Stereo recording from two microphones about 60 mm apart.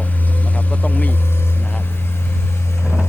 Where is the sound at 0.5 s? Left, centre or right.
Left.